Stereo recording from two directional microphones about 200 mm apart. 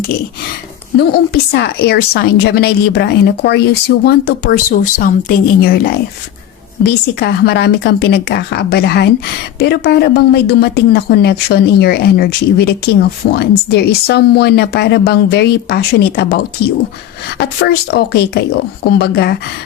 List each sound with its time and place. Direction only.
0.9 s a woman's voice: 55° left (ahead or behind)